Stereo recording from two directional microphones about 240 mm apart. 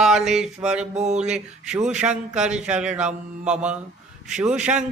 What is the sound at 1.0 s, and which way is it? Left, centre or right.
Mantra, right.